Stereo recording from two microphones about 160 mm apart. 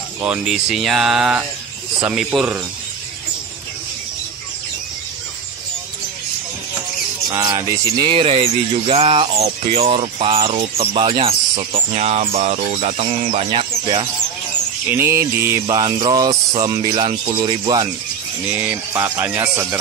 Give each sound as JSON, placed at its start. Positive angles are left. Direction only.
{"t": 0.2, "sound": "speech", "side_deg": -5}
{"t": 7.2, "sound": "speech", "side_deg": -25}
{"t": 14.9, "sound": "speech", "side_deg": -15}
{"t": 15.6, "sound": "speech", "side_deg": -25}
{"t": 18.6, "sound": "speech", "side_deg": -15}